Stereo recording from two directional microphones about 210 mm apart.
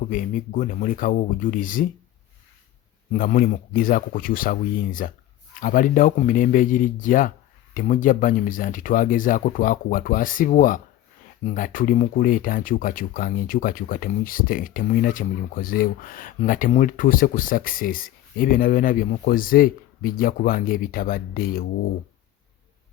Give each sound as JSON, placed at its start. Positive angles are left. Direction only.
{"t": 0.0, "sound": "speech", "side_deg": 40}
{"t": 3.1, "sound": "speech", "side_deg": 40}